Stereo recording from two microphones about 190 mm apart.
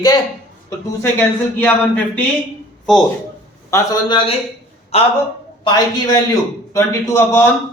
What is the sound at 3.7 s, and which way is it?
Speech, 20° left (ahead or behind).